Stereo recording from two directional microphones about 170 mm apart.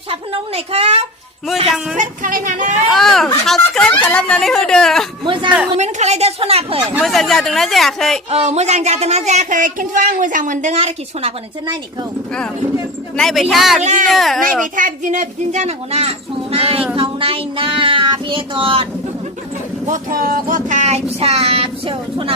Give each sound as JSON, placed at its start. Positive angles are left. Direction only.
{"t": 0.1, "sound": "speech", "side_deg": -35}
{"t": 2.0, "sound": "speech", "side_deg": -50}
{"t": 2.9, "sound": "speech", "side_deg": 0}
{"t": 5.2, "sound": "speech", "side_deg": -30}
{"t": 5.7, "sound": "speech", "side_deg": -40}
{"t": 7.0, "sound": "speech", "side_deg": 0}
{"t": 8.3, "sound": "speech", "side_deg": -40}
{"t": 10.7, "sound": "speech", "side_deg": -35}
{"t": 13.1, "sound": "speech", "side_deg": 0}
{"t": 13.8, "sound": "speech", "side_deg": -50}
{"t": 14.1, "sound": "speech", "side_deg": 0}
{"t": 14.4, "sound": "speech", "side_deg": -50}
{"t": 19.9, "sound": "speech", "side_deg": -55}